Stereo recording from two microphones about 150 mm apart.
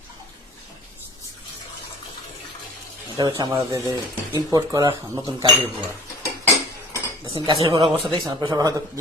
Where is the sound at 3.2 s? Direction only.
30° right (ahead or behind).